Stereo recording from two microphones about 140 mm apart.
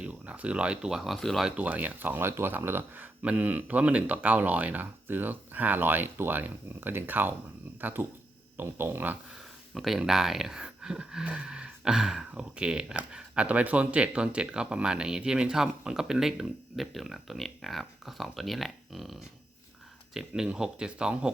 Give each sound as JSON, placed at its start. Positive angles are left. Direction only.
{"t": 0.0, "sound": "speech", "side_deg": -10}
{"t": 9.7, "sound": "speech", "side_deg": 0}